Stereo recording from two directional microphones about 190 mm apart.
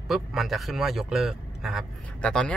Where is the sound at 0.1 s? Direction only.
Centre (ahead or behind).